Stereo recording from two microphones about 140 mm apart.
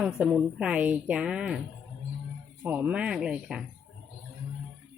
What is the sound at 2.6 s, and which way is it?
Speech, 10° right (ahead or behind).